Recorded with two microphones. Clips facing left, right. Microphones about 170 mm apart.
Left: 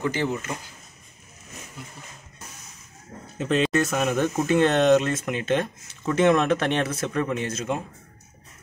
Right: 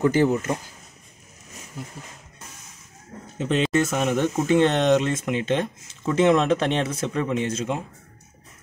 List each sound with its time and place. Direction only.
0.0 s speech: 40° right (ahead or behind)
3.3 s speech: 25° right (ahead or behind)